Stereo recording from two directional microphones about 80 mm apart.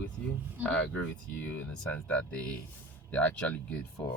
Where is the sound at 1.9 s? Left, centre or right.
Centre.